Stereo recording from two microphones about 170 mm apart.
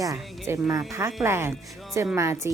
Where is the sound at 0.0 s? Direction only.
15° right (ahead or behind).